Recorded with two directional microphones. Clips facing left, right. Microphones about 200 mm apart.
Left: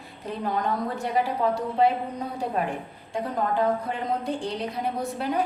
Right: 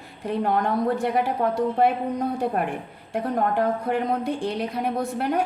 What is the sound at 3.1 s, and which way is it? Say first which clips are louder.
A woman's voice: right 3 dB; 60° right (ahead or behind).